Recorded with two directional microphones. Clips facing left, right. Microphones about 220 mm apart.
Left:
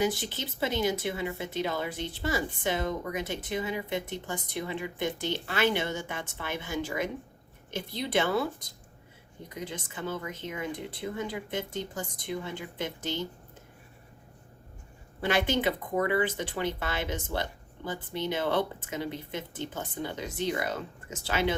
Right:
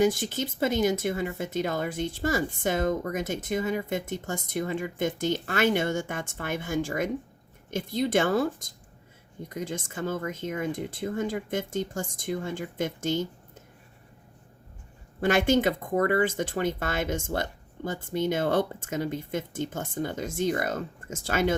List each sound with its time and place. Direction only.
0.0 s speech: 45° right (ahead or behind)
15.2 s speech: 45° right (ahead or behind)